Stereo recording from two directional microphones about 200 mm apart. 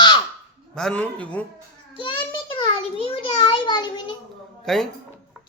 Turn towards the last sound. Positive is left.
turn(degrees=0)  # may be behind; listen again after turning